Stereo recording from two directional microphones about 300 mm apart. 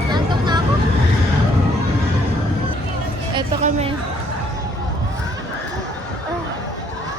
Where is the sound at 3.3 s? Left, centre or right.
Centre.